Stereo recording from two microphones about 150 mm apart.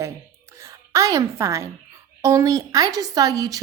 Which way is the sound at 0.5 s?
20° right (ahead or behind).